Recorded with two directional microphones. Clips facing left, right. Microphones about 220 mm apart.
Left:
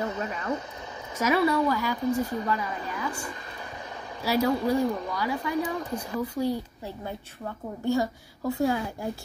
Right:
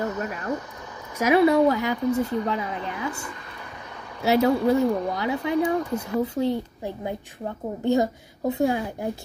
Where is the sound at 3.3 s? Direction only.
30° left (ahead or behind).